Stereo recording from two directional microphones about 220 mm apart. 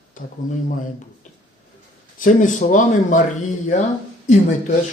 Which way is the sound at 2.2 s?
35° left (ahead or behind).